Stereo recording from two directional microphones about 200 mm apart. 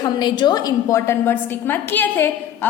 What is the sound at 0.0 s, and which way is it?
A woman's voice, 20° left (ahead or behind).